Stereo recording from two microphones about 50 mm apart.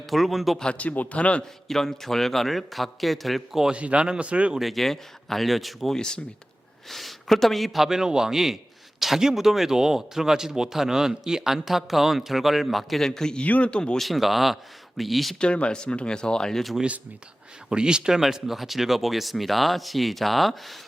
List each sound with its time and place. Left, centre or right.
0.1 s speech: centre
0.6 s speech: left
1.6 s speech: centre
3.7 s speech: right
4.6 s speech: centre
6.0 s speech: centre
6.8 s a man's voice: centre
13.4 s speech: left
14.0 s speech: centre
15.4 s speech: left
17.7 s speech: centre